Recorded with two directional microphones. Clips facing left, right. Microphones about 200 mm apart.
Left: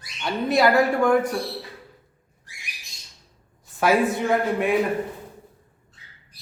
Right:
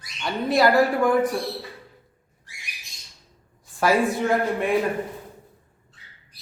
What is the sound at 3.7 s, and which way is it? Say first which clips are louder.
Speech: left 1 dB; centre (ahead or behind).